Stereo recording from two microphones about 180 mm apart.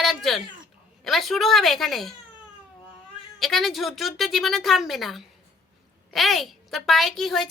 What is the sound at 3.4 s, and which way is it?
A woman's voice, centre (ahead or behind).